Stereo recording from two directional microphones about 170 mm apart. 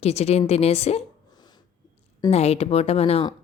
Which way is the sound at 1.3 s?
25° left (ahead or behind).